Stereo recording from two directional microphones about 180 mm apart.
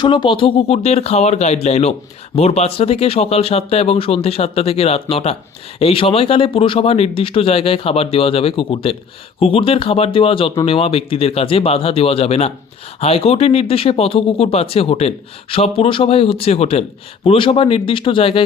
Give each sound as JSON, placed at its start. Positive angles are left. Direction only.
{"t": 0.0, "sound": "speech", "side_deg": 25}